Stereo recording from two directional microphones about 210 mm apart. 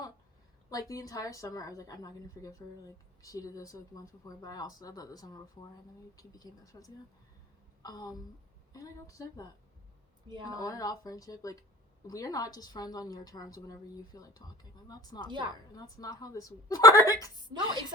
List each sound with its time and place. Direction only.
0.7 s a woman's voice: 15° left (ahead or behind)
10.2 s speech: 20° right (ahead or behind)
10.5 s a woman's voice: 15° left (ahead or behind)